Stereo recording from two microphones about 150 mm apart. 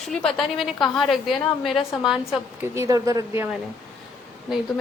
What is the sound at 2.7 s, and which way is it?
Speech, 20° right (ahead or behind).